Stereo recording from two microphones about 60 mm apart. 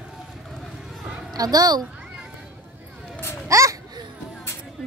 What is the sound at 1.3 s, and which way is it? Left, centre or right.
Speech, right.